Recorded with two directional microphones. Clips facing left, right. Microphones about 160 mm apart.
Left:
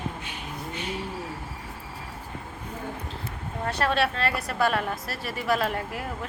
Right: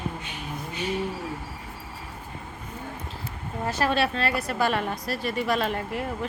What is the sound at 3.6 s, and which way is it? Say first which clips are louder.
A woman's voice: right 1 dB; centre (ahead or behind).